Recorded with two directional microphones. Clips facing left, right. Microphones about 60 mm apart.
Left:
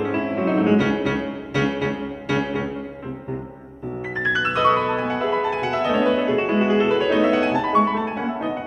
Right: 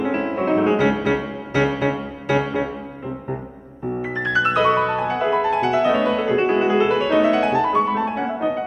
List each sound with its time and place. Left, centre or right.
0.0 s music: centre
4.4 s music: centre
5.0 s music: centre